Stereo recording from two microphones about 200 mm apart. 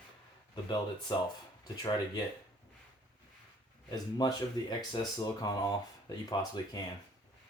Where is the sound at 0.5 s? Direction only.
20° left (ahead or behind).